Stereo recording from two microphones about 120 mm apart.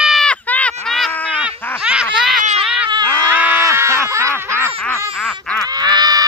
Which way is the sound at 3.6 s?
25° right (ahead or behind).